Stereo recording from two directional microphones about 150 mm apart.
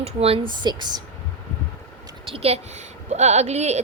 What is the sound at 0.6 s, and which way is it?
Speech, 30° right (ahead or behind).